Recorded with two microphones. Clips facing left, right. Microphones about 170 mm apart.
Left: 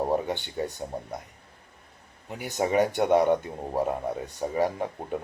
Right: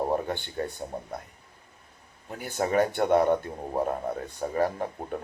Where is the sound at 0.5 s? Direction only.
15° left (ahead or behind).